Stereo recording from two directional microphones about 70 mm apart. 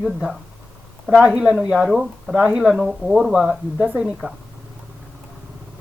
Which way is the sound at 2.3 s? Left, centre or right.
Centre.